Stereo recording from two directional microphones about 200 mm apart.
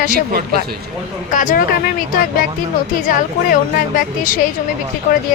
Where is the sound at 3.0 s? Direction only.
45° left (ahead or behind).